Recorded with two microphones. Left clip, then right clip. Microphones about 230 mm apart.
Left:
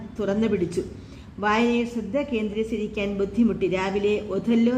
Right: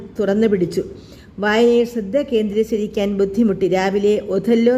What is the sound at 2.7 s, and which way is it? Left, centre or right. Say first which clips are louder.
Speech: right 7 dB; right.